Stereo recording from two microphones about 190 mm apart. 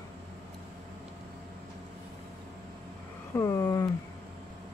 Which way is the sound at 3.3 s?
15° left (ahead or behind).